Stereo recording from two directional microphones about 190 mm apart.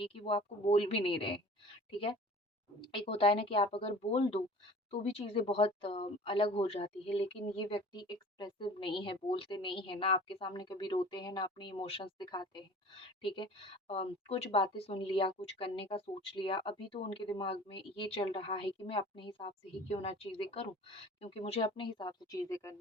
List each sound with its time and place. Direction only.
0.0 s speech: 30° left (ahead or behind)
2.8 s speech: 30° left (ahead or behind)